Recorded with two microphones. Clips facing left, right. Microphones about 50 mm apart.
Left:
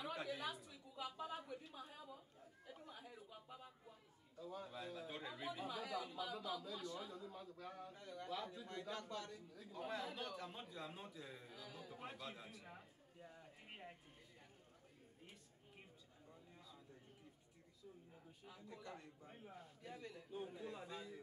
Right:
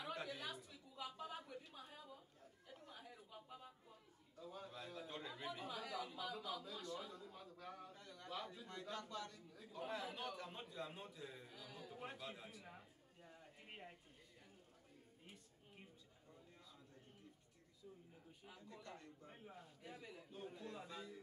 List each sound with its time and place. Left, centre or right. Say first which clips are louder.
0.0 s a sound: left 2 dB; centre
7.9 s a sound: left 5 dB; centre
8.6 s a man's voice: left 2 dB; centre
8.9 s a man's voice: even; centre
18.6 s a man's voice: left 2 dB; centre
19.2 s a man's voice: left 1 dB; centre
19.8 s a man's voice: left 3 dB; centre
20.5 s a man's voice: left 2 dB; centre